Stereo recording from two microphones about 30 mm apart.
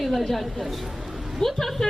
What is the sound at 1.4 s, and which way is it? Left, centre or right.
Speech, left.